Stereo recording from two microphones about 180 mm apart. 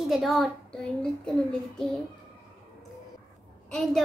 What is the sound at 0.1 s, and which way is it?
Speech, centre (ahead or behind).